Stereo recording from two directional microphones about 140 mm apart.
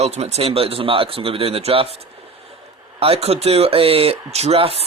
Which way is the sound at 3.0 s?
45° right (ahead or behind).